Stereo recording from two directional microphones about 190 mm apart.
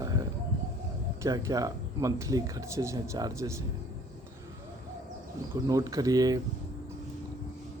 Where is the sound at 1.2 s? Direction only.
15° right (ahead or behind).